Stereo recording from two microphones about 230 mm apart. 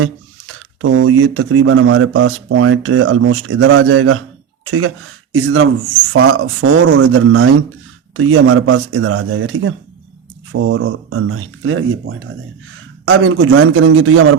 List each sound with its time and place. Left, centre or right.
0.0 s speech: right
6.1 s speech: right